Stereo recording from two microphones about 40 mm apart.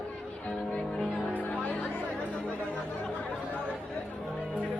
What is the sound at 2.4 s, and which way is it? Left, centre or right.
Chatter, left.